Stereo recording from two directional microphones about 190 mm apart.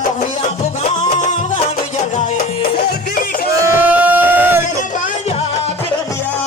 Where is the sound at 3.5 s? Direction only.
15° right (ahead or behind).